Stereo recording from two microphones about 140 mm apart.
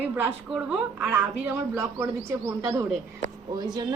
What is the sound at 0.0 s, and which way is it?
A woman's voice, 10° right (ahead or behind).